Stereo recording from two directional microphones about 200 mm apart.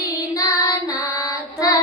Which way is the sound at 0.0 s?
15° left (ahead or behind).